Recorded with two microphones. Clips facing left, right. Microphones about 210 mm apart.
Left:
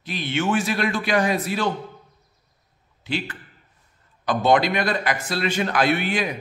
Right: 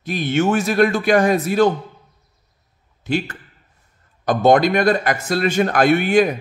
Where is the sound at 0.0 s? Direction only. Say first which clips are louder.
Right 6 dB; 45° right (ahead or behind).